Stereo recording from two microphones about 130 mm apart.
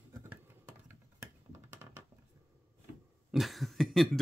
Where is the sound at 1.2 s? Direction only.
20° right (ahead or behind).